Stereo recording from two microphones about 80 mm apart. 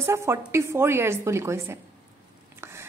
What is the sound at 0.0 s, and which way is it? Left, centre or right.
A woman's voice, right.